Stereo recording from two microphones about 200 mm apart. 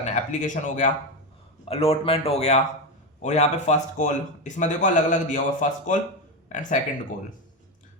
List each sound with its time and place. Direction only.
0.0 s speech: 40° left (ahead or behind)